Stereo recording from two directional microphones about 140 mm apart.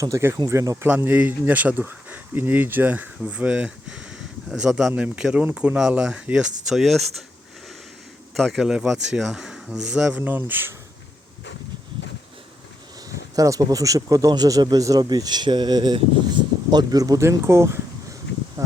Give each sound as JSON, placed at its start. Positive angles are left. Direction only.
{"t": 0.0, "sound": "speech", "side_deg": -20}
{"t": 8.4, "sound": "speech", "side_deg": 0}
{"t": 13.1, "sound": "speech", "side_deg": -25}